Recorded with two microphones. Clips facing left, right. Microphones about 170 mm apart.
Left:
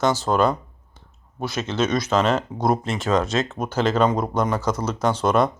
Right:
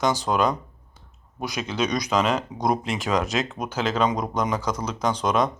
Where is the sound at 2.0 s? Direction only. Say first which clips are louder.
Left 2 dB; 10° right (ahead or behind).